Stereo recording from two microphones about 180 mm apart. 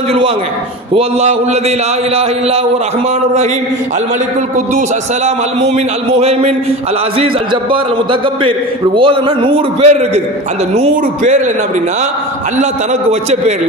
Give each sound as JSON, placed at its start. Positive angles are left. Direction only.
{"t": 0.9, "sound": "a man's voice", "side_deg": -35}
{"t": 4.7, "sound": "a man's voice", "side_deg": -40}
{"t": 7.7, "sound": "a man's voice", "side_deg": -30}